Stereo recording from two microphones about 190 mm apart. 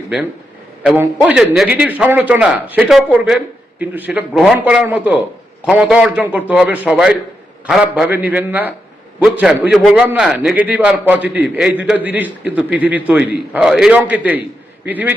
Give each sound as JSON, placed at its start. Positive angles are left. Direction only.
{"t": 0.9, "sound": "a man's voice", "side_deg": -5}